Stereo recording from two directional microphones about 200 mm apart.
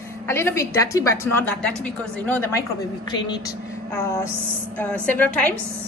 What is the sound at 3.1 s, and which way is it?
A woman's voice, 20° left (ahead or behind).